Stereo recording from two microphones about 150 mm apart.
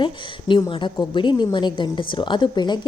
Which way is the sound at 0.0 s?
35° left (ahead or behind).